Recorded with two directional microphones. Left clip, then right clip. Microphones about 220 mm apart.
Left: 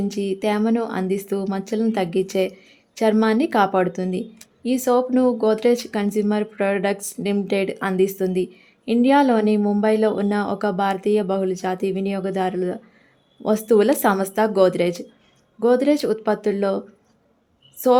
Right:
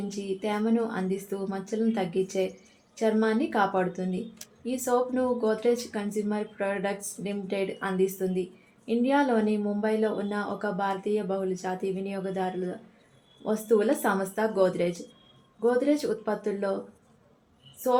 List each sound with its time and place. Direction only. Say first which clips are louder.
0.1 s speech: left 7 dB; 50° left (ahead or behind)
17.8 s speech: left 8 dB; 50° left (ahead or behind)